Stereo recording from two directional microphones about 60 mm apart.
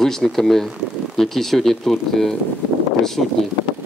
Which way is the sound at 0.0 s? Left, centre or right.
Centre.